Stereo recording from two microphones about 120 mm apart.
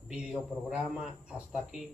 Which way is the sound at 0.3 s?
5° right (ahead or behind).